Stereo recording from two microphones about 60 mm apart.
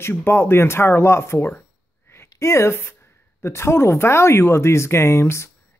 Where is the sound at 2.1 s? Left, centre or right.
Left.